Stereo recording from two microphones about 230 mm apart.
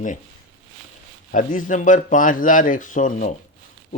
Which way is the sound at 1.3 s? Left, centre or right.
Left.